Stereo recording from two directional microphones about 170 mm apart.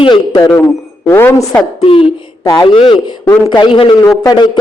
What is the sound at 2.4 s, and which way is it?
A man's voice, 25° left (ahead or behind).